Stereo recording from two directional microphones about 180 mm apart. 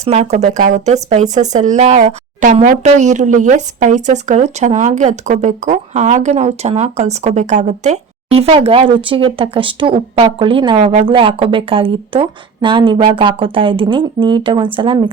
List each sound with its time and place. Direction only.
0.0 s speech: 35° right (ahead or behind)